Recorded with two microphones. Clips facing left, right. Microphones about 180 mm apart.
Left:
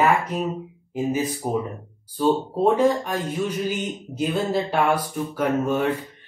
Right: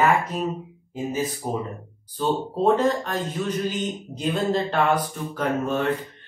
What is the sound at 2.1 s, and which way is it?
Speech, 10° left (ahead or behind).